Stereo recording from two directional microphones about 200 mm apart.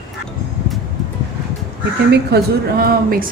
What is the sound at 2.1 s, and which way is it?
Speech, 50° right (ahead or behind).